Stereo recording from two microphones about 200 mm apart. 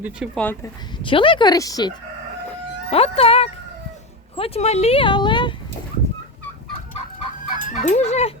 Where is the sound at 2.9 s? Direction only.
30° left (ahead or behind).